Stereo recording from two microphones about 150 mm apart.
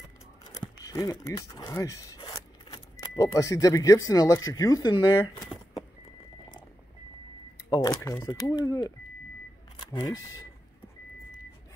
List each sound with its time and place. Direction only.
0.4 s a sound: 25° left (ahead or behind)
1.2 s speech: 20° left (ahead or behind)
8.1 s speech: 25° left (ahead or behind)